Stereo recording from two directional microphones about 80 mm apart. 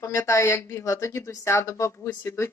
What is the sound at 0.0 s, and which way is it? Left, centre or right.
Speech, left.